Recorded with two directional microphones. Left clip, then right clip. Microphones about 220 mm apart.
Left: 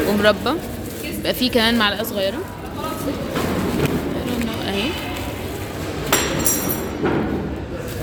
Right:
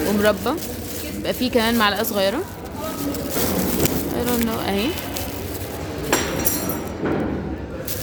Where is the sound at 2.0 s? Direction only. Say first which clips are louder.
Right 1 dB; 25° right (ahead or behind).